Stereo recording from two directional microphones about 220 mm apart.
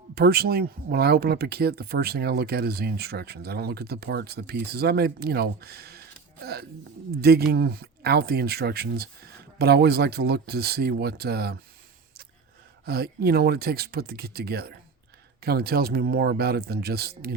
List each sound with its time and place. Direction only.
0.1 s speech: 45° right (ahead or behind)
12.8 s speech: 45° right (ahead or behind)